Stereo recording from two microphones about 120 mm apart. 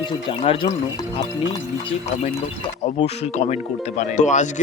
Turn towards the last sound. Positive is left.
turn(degrees=90)